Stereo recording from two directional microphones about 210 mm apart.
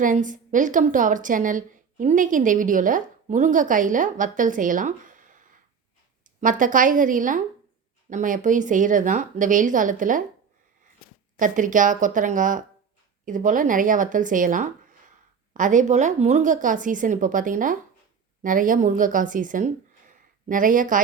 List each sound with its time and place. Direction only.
0.0 s a woman's voice: 40° right (ahead or behind)
11.3 s a woman's voice: 40° right (ahead or behind)